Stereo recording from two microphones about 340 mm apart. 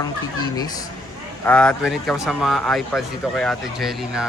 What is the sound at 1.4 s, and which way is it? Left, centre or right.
Speech, centre.